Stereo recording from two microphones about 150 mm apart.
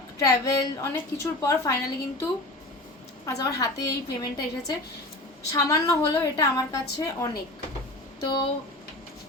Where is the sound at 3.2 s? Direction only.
25° left (ahead or behind).